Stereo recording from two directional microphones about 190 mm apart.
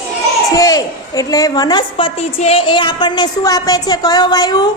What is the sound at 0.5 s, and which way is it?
A woman's voice, 20° left (ahead or behind).